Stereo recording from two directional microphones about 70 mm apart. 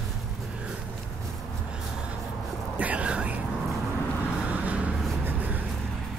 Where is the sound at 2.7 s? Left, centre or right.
Centre.